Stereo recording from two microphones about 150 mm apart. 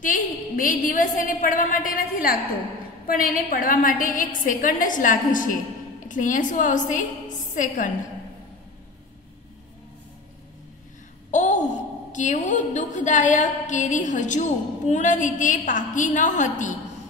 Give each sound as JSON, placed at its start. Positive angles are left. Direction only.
{"t": 0.0, "sound": "a woman's voice", "side_deg": 60}
{"t": 11.3, "sound": "a woman's voice", "side_deg": 55}